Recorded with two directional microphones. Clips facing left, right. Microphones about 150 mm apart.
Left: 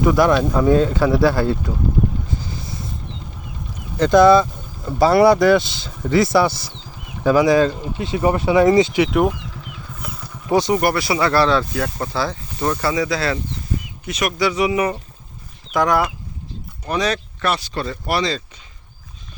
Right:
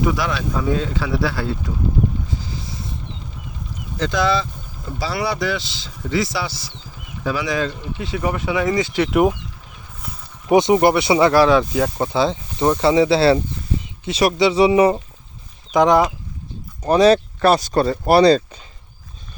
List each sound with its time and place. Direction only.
0.0 s speech: 50° left (ahead or behind)
2.3 s vehicle: 50° left (ahead or behind)
4.0 s speech: 50° left (ahead or behind)
7.3 s speech: 40° left (ahead or behind)
8.8 s speech: 15° left (ahead or behind)
10.5 s speech: 20° right (ahead or behind)
16.8 s speech: 30° right (ahead or behind)